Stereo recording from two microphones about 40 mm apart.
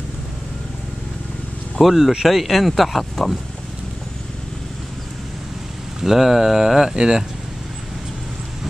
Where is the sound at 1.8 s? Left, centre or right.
Centre.